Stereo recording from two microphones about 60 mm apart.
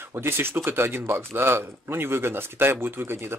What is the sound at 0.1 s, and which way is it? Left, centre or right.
Speech, right.